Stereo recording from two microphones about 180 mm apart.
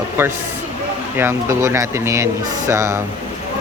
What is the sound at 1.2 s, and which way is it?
Speech, 15° right (ahead or behind).